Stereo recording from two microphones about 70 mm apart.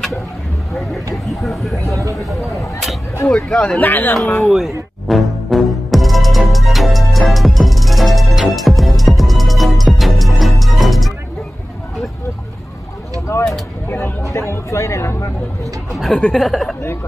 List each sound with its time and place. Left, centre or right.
1.1 s speech: centre
3.3 s speech: centre
4.2 s a man's voice: left
4.5 s music: centre
13.3 s a sound: left
16.3 s speech: centre